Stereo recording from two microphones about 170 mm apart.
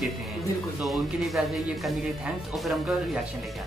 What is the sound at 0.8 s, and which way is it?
Speech, centre (ahead or behind).